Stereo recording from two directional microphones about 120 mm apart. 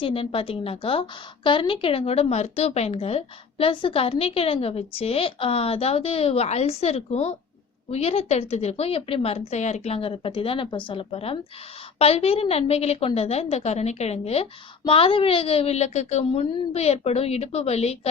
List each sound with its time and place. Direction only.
0.0 s a woman's voice: 50° left (ahead or behind)
14.8 s a woman's voice: 50° left (ahead or behind)